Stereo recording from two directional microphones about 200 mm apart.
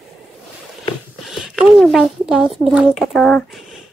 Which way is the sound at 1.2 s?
Centre (ahead or behind).